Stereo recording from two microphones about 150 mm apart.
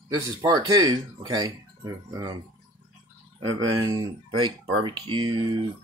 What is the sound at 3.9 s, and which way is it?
Speech, 30° right (ahead or behind).